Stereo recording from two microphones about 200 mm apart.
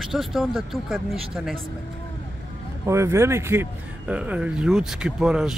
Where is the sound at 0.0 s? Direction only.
Centre (ahead or behind).